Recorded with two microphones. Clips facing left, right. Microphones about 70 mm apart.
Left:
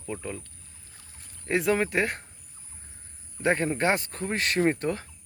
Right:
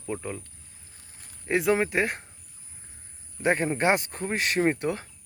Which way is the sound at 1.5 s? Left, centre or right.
Centre.